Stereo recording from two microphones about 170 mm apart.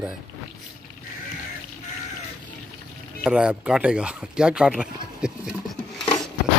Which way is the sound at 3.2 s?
5° right (ahead or behind).